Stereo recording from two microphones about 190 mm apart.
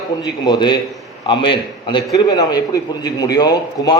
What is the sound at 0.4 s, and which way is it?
A man's voice, 25° left (ahead or behind).